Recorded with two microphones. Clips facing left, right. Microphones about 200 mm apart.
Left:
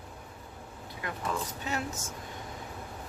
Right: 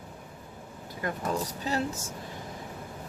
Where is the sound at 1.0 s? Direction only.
40° right (ahead or behind).